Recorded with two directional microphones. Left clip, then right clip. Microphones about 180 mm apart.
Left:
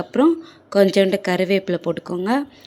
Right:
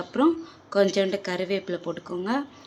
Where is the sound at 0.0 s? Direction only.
30° left (ahead or behind).